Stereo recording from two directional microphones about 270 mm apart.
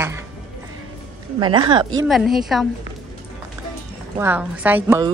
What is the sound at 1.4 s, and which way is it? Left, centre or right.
Speech, centre.